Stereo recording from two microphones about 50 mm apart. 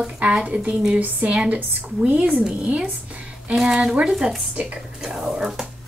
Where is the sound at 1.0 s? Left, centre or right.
Right.